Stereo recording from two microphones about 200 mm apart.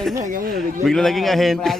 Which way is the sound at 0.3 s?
45° right (ahead or behind).